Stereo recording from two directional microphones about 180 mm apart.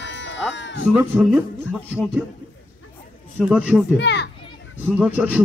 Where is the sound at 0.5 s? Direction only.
90° left.